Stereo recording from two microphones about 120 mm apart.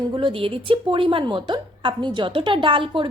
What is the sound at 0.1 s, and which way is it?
A woman's voice, 45° right (ahead or behind).